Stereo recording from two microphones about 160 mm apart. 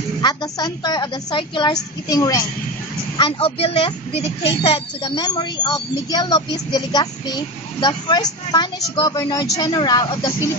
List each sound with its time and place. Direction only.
0.2 s a woman's voice: 25° left (ahead or behind)
3.2 s speech: 35° left (ahead or behind)
5.1 s a woman's voice: 25° left (ahead or behind)